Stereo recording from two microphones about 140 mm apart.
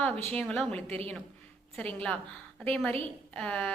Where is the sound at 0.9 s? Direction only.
45° right (ahead or behind).